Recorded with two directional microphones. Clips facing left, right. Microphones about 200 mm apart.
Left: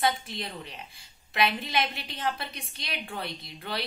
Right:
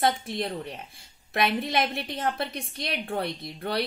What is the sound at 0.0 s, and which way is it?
Speech, 55° right (ahead or behind).